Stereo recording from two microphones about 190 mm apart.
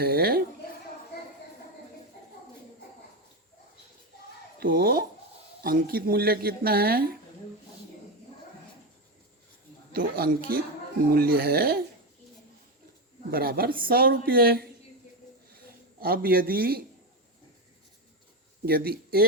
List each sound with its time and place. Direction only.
0.0 s speech: 55° right (ahead or behind)
4.6 s speech: 50° right (ahead or behind)
9.9 s speech: 50° right (ahead or behind)
13.3 s speech: 55° right (ahead or behind)
16.0 s speech: 50° right (ahead or behind)
18.6 s speech: 55° right (ahead or behind)